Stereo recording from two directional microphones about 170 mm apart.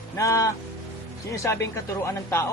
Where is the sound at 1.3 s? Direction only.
15° left (ahead or behind).